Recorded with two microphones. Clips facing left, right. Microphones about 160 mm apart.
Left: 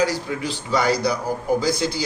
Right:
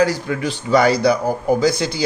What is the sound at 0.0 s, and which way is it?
A man's voice, 60° right (ahead or behind).